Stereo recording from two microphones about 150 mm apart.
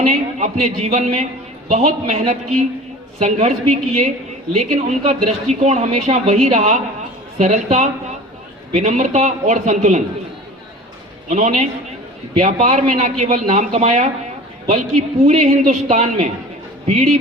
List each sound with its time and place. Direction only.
0.0 s a woman's voice: 50° right (ahead or behind)
5.0 s a woman's voice: 50° right (ahead or behind)
11.3 s a woman's voice: 50° right (ahead or behind)